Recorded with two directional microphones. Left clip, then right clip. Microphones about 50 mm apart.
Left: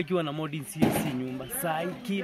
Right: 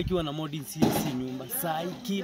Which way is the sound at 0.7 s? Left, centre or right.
Left.